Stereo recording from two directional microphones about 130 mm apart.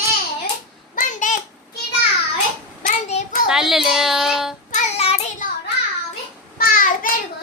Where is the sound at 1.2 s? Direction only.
75° left (ahead or behind).